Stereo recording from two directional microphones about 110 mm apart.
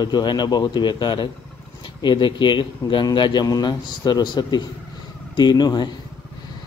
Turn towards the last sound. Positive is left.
turn(degrees=40)  # may be behind; listen again after turning